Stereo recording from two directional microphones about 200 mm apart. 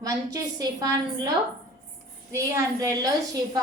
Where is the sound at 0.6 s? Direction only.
20° right (ahead or behind).